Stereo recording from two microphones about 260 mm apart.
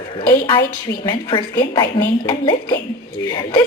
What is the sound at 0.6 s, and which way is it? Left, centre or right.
Speech, left.